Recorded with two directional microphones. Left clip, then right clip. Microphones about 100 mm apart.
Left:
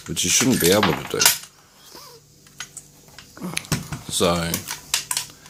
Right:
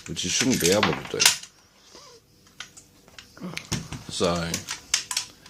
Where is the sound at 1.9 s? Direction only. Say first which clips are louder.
Left 5 dB; 30° left (ahead or behind).